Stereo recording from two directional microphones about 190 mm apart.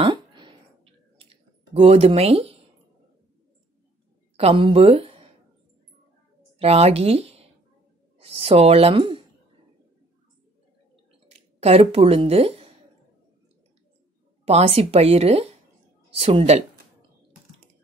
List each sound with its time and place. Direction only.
0.0 s clicking: 25° right (ahead or behind)
4.4 s speech: 30° right (ahead or behind)
6.6 s speech: 30° right (ahead or behind)
11.2 s speech: 35° right (ahead or behind)
14.4 s speech: 30° right (ahead or behind)